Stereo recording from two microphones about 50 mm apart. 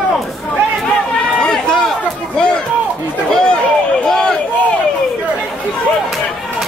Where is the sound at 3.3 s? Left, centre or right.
Centre.